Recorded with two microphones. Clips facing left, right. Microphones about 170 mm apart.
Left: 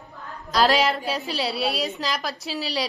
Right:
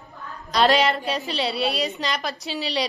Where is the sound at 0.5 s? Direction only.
Centre (ahead or behind).